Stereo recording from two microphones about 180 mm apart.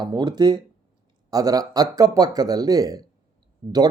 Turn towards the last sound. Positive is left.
turn(degrees=-25)  # may be behind; listen again after turning